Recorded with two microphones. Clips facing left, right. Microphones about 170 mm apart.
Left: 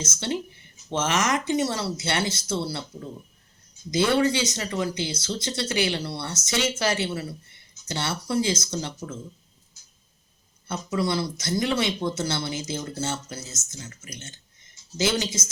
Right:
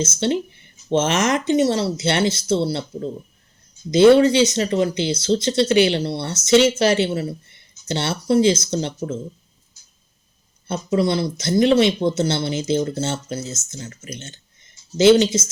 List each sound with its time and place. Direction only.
0.0 s speech: 25° right (ahead or behind)
4.2 s speech: 20° right (ahead or behind)
10.7 s speech: 25° right (ahead or behind)